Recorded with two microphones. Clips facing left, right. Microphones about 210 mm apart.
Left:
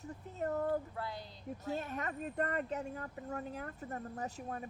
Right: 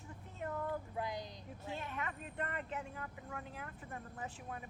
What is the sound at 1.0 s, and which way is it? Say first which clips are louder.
Speech: right 2 dB; 15° right (ahead or behind).